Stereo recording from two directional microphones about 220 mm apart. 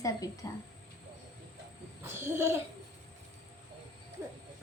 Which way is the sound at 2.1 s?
10° right (ahead or behind).